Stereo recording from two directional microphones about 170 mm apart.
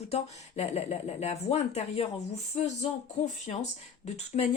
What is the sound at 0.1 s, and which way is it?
A woman's voice, 40° left (ahead or behind).